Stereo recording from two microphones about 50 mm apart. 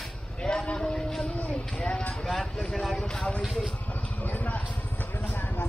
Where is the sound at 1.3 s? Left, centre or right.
Left.